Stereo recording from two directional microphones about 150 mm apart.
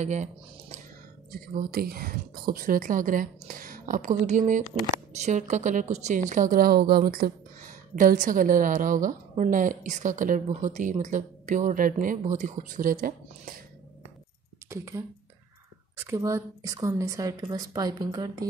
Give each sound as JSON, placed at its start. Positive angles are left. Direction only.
{"t": 0.0, "sound": "speech", "side_deg": -50}
{"t": 1.3, "sound": "a woman's voice", "side_deg": -75}
{"t": 14.7, "sound": "speech", "side_deg": -20}